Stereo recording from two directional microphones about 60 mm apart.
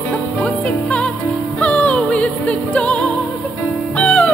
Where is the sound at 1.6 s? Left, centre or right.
Left.